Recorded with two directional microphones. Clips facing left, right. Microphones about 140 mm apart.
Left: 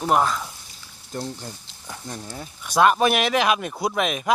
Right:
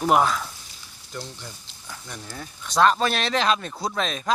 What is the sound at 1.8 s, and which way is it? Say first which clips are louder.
Speech: left 4 dB; 25° left (ahead or behind).